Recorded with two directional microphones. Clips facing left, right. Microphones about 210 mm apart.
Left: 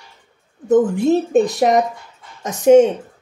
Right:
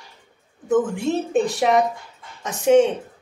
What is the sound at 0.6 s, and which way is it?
A woman's voice, 40° left (ahead or behind).